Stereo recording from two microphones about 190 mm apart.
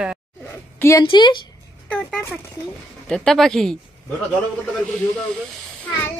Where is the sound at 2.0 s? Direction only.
Centre (ahead or behind).